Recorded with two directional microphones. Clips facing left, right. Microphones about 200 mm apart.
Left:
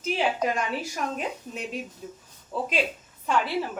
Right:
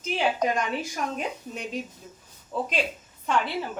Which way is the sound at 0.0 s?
5° left (ahead or behind).